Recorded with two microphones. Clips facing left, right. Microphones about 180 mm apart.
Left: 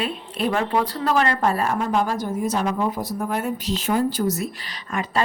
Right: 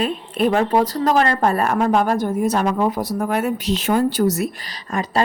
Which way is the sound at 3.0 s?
80° right.